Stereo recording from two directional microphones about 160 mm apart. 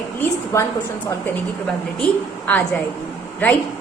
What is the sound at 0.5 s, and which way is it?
Speech, 15° left (ahead or behind).